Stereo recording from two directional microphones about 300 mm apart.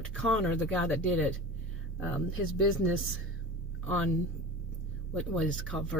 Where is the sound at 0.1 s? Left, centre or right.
Centre.